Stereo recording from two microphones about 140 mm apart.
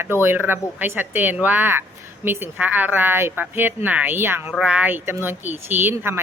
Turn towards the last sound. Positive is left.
turn(degrees=-15)  # may be behind; listen again after turning